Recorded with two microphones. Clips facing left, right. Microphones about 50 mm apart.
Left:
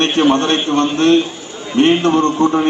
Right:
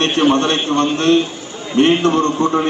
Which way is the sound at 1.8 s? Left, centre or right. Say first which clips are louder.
Left 1 dB; left.